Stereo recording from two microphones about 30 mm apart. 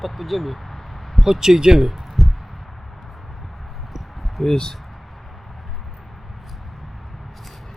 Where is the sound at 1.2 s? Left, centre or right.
Centre.